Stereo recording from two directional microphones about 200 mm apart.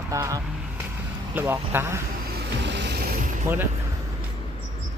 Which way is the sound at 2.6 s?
60° right (ahead or behind).